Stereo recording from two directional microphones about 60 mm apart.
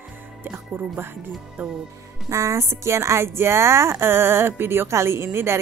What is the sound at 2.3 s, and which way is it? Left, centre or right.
Speech, right.